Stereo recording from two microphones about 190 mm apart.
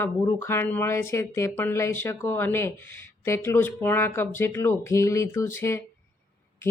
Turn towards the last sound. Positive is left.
turn(degrees=15)  # may be behind; listen again after turning